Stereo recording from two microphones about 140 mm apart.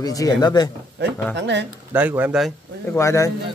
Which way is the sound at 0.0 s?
25° left (ahead or behind).